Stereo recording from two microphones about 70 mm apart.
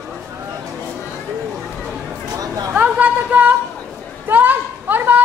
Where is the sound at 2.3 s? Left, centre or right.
Right.